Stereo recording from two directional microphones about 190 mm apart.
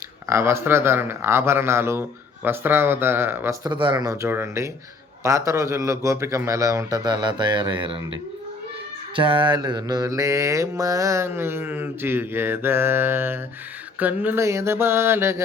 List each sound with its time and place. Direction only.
0.3 s speech: 15° right (ahead or behind)
9.1 s speech: 25° right (ahead or behind)